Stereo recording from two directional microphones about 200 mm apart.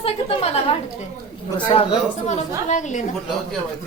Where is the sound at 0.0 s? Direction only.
30° left (ahead or behind).